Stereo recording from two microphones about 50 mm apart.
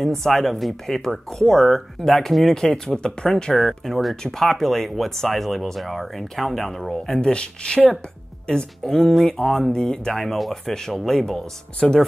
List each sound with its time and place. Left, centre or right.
0.2 s speech: centre
8.8 s speech: centre